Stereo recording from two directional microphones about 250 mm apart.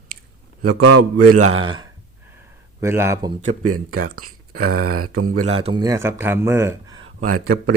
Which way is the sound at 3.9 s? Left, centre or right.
Right.